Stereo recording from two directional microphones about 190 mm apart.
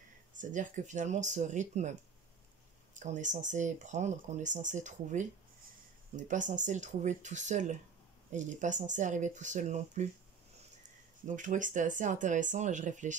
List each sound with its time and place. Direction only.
0.4 s speech: 40° right (ahead or behind)